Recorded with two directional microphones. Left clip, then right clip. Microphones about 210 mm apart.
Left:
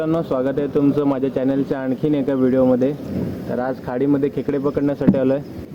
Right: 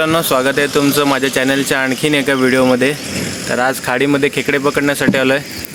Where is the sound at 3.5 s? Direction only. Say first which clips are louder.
Right 9 dB; 40° right (ahead or behind).